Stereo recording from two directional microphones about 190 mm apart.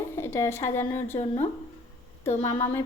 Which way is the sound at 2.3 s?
15° left (ahead or behind).